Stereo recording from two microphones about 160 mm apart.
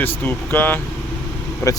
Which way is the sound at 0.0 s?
10° left (ahead or behind).